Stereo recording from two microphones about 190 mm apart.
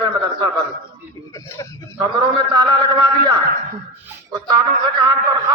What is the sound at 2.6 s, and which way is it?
Speech, 20° right (ahead or behind).